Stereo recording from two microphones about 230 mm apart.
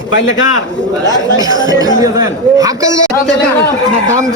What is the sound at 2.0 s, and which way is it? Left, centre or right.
Speech, centre.